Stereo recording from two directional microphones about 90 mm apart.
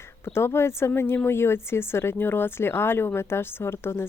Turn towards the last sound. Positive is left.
turn(degrees=25)  # may be behind; listen again after turning